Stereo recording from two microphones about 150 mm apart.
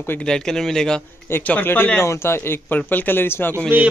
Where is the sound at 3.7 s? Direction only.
10° right (ahead or behind).